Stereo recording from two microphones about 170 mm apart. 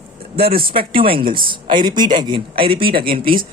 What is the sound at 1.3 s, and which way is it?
Speech, 30° right (ahead or behind).